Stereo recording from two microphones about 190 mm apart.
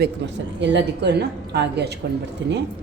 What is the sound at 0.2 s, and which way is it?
A woman's voice, 65° right (ahead or behind).